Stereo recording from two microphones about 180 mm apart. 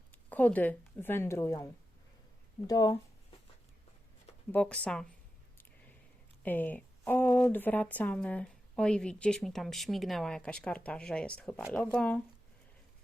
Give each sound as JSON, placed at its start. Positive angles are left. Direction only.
{"t": 0.1, "sound": "speech", "side_deg": 10}
{"t": 2.6, "sound": "speech", "side_deg": 20}
{"t": 4.5, "sound": "speech", "side_deg": 5}
{"t": 6.4, "sound": "speech", "side_deg": 10}